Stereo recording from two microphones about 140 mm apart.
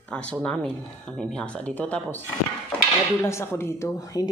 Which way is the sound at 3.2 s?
20° left (ahead or behind).